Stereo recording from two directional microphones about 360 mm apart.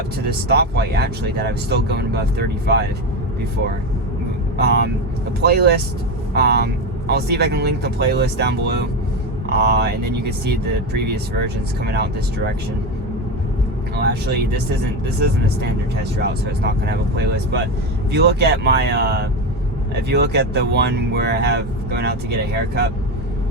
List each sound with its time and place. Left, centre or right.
0.3 s speech: right
4.5 s speech: right
14.0 s speech: right
16.1 s speech: right